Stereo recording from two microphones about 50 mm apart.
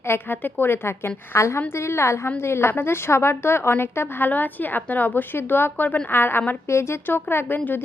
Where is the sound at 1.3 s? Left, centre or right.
Left.